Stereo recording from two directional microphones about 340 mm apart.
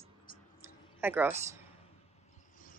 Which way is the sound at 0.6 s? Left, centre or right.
Centre.